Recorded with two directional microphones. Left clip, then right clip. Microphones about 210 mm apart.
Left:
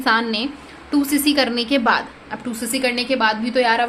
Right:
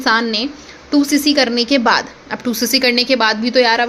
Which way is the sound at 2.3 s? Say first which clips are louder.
Right 9 dB; 40° right (ahead or behind).